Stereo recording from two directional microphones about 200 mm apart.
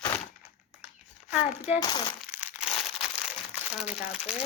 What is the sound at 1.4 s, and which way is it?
Speech, 35° left (ahead or behind).